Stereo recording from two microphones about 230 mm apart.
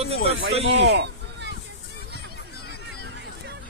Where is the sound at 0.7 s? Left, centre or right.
Right.